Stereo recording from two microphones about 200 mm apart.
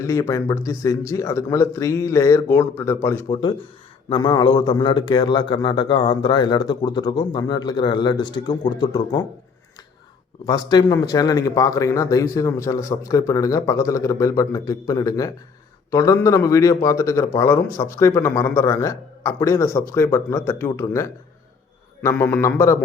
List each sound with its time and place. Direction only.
0.0 s a man's voice: 15° left (ahead or behind)
4.1 s a man's voice: 20° left (ahead or behind)
10.4 s a man's voice: 20° left (ahead or behind)